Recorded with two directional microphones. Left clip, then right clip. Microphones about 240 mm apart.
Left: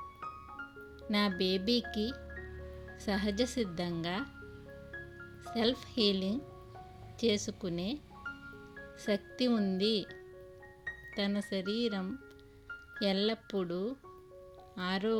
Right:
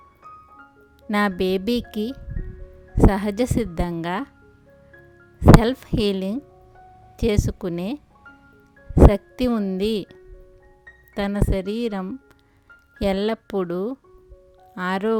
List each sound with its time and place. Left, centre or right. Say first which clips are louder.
1.0 s a woman's voice: right 10 dB; right
3.1 s a woman's voice: right 10 dB; right
5.5 s a woman's voice: right 11 dB; right
9.0 s a woman's voice: right 16 dB; right
11.1 s a woman's voice: right 11 dB; right